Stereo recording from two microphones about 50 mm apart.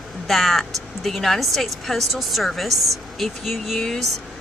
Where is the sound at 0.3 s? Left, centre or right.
Centre.